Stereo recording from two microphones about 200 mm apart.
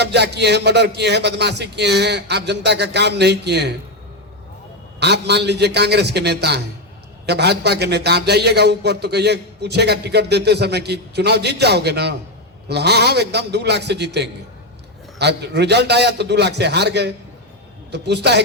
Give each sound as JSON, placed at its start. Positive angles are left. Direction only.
{"t": 0.0, "sound": "a man's voice", "side_deg": -55}
{"t": 4.9, "sound": "a man's voice", "side_deg": -55}